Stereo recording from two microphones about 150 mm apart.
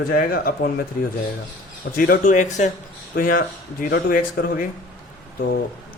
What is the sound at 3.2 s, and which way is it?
Speech, 75° left (ahead or behind).